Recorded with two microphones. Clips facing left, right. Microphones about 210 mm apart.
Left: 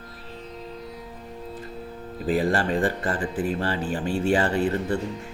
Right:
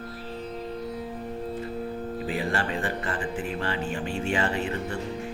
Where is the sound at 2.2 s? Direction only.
40° left (ahead or behind).